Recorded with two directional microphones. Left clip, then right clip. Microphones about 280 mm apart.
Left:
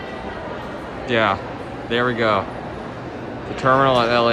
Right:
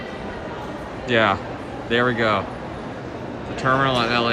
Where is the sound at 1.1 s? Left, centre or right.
Centre.